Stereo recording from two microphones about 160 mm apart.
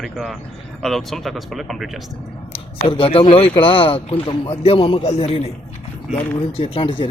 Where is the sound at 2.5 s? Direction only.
35° left (ahead or behind).